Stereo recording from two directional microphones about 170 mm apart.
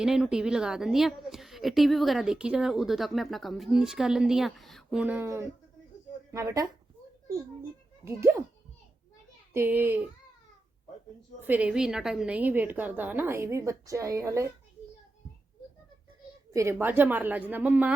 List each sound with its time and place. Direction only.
0.0 s a woman's voice: 5° right (ahead or behind)
8.0 s a woman's voice: 15° right (ahead or behind)
9.5 s a woman's voice: 10° right (ahead or behind)
11.3 s a woman's voice: 10° right (ahead or behind)
16.5 s a woman's voice: 15° right (ahead or behind)